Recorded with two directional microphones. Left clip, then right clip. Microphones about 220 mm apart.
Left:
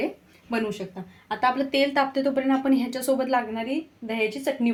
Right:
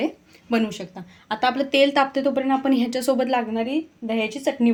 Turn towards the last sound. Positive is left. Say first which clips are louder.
# right 2 dB
turn(degrees=-30)  # may be behind; listen again after turning